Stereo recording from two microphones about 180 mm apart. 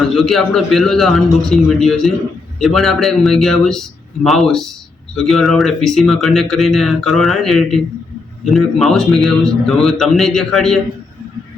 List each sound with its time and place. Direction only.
0.2 s speech: centre (ahead or behind)